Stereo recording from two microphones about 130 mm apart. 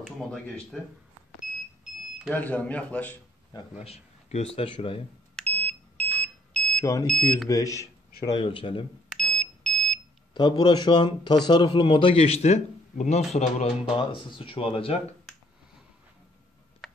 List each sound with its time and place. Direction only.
0.7 s speech: 5° left (ahead or behind)
2.3 s a man's voice: 10° left (ahead or behind)
3.7 s a man's voice: 50° left (ahead or behind)
5.3 s smoke detector: 10° left (ahead or behind)
7.4 s speech: 25° left (ahead or behind)
8.4 s a man's voice: 40° left (ahead or behind)
9.1 s smoke detector: 5° left (ahead or behind)
10.3 s a man's voice: 35° left (ahead or behind); by 13.7 s 60° left (ahead or behind)
13.8 s a man's voice: 40° left (ahead or behind)